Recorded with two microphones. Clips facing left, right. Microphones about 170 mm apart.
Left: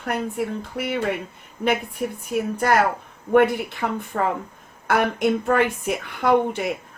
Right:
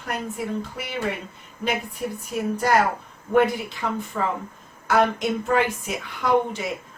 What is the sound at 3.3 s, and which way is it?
A woman's voice, 60° left (ahead or behind).